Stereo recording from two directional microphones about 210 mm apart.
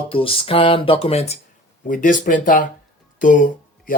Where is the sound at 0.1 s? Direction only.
25° left (ahead or behind).